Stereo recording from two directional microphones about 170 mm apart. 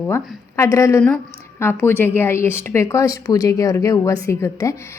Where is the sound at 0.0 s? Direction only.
15° left (ahead or behind).